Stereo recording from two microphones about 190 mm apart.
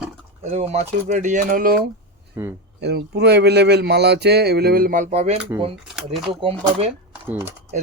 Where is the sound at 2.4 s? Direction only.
15° right (ahead or behind).